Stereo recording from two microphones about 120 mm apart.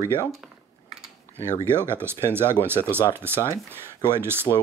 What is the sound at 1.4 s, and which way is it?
Speech, 20° right (ahead or behind).